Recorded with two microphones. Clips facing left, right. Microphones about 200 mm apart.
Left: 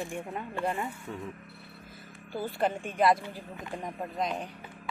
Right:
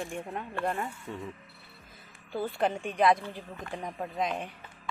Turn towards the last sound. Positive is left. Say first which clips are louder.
# even
turn(degrees=0)  # may be behind; listen again after turning